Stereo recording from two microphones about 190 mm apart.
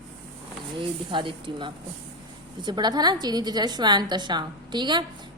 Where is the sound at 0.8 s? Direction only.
25° right (ahead or behind).